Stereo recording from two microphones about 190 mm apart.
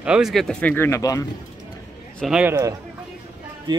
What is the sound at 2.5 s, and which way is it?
Speech, 15° right (ahead or behind).